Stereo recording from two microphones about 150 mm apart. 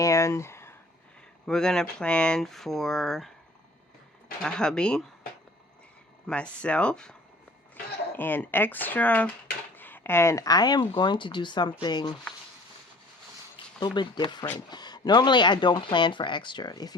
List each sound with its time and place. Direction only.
0.0 s a sound: 20° left (ahead or behind)
1.5 s speech: 5° left (ahead or behind)
4.4 s speech: 5° left (ahead or behind)
6.2 s speech: 5° left (ahead or behind); by 12.1 s 30° left (ahead or behind)
13.7 s speech: 30° left (ahead or behind)